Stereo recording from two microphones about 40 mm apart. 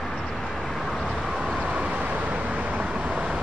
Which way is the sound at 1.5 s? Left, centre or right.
Right.